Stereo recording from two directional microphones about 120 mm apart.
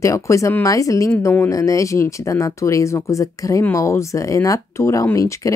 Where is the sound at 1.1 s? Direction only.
15° left (ahead or behind).